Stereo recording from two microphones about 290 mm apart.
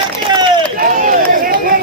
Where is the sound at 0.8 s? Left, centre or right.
Right.